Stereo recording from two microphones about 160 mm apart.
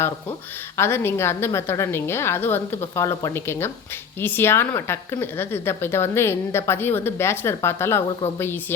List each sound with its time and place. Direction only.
0.8 s a woman's voice: 15° left (ahead or behind)